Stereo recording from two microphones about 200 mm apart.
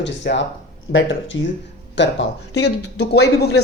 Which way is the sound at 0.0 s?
60° left (ahead or behind).